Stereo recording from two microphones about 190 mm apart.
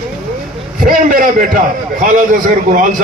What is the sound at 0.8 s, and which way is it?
A man's voice, 45° right (ahead or behind).